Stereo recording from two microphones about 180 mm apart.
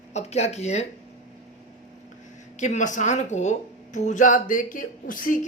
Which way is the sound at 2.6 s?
45° left (ahead or behind).